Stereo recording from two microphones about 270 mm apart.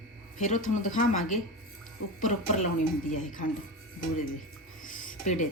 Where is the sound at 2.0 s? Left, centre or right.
Left.